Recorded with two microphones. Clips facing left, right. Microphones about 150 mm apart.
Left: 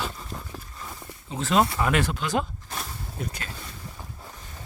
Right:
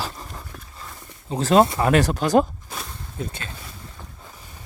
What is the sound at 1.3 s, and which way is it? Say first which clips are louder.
Speech: right 6 dB; 40° right (ahead or behind).